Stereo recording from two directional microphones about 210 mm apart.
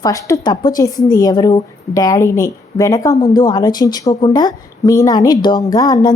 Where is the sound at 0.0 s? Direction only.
15° left (ahead or behind).